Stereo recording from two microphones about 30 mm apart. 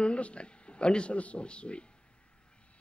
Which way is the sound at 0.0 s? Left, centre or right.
Left.